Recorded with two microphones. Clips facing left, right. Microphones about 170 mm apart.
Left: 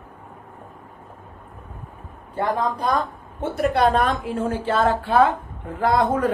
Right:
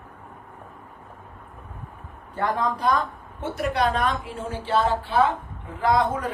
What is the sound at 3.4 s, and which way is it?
A woman's voice, 50° left (ahead or behind).